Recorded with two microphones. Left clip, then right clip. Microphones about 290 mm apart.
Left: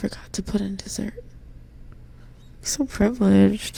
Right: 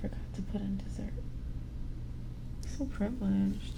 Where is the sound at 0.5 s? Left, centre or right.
Left.